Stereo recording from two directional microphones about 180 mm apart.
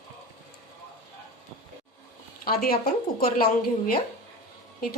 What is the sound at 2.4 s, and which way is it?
A woman's voice, 55° left (ahead or behind).